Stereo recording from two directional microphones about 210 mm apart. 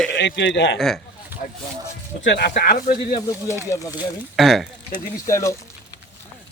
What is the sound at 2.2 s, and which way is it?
Speech, 50° left (ahead or behind).